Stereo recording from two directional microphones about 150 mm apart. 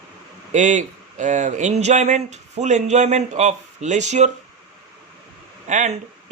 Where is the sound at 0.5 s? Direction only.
55° right (ahead or behind).